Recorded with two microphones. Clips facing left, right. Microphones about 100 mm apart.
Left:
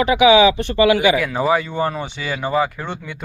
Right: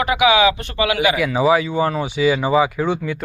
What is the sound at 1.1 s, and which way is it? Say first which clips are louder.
Speech: right 2 dB; 5° right (ahead or behind).